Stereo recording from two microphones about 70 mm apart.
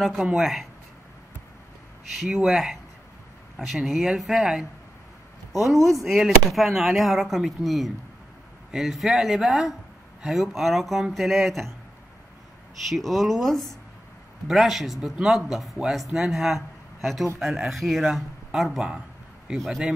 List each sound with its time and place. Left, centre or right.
0.0 s a man's voice: centre
2.1 s a man's voice: centre
5.8 s speech: right
6.0 s a man's voice: centre
12.8 s a man's voice: centre